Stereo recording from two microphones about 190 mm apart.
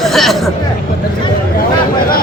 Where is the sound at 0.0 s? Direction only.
Centre (ahead or behind).